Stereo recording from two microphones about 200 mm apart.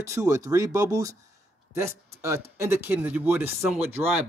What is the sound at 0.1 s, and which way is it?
A man's voice, 15° right (ahead or behind).